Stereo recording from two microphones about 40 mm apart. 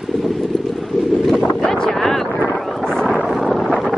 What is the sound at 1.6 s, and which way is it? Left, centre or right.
Boat, centre.